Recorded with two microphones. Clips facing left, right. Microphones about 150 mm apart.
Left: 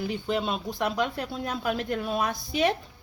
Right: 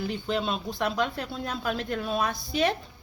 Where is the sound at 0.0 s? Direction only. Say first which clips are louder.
Left 1 dB; 10° left (ahead or behind).